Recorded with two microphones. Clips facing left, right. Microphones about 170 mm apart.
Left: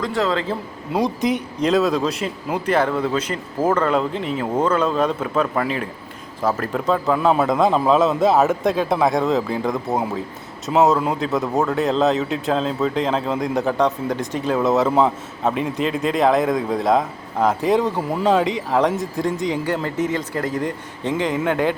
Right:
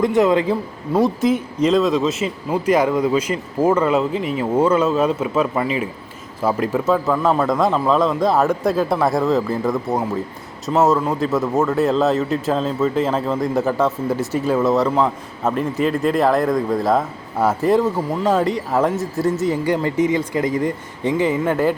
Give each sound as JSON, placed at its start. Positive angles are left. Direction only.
{"t": 0.0, "sound": "a man's voice", "side_deg": -20}
{"t": 1.2, "sound": "speech", "side_deg": 0}